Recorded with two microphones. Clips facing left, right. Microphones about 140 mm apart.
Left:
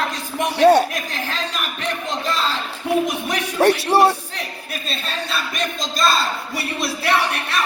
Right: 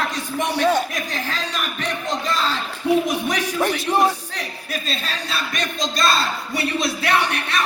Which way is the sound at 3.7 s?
35° left (ahead or behind).